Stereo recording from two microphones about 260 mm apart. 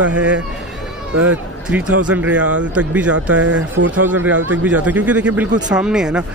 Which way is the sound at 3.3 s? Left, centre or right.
Right.